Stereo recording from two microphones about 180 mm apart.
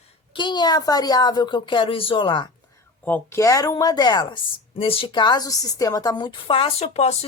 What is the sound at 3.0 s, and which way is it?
Speech, 10° left (ahead or behind).